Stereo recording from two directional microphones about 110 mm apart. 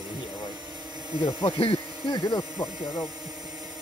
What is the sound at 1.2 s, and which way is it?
Speech, 50° left (ahead or behind).